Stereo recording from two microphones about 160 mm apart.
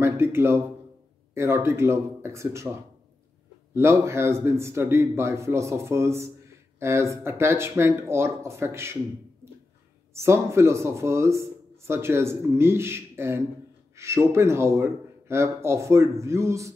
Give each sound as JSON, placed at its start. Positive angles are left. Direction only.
{"t": 0.0, "sound": "a sound", "side_deg": -15}
{"t": 1.3, "sound": "speech", "side_deg": -15}
{"t": 10.1, "sound": "speech", "side_deg": -15}